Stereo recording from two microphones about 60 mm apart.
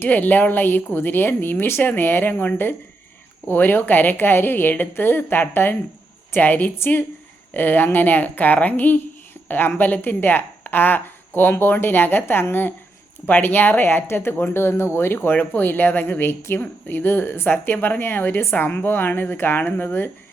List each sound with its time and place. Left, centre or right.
0.0 s speech: left